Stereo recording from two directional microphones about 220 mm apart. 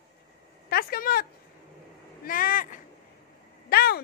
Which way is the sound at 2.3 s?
40° left (ahead or behind).